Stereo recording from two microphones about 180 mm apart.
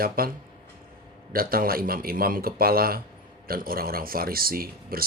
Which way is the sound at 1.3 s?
55° right (ahead or behind).